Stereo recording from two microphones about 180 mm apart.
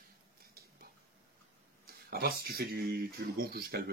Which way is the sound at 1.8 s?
60° right (ahead or behind).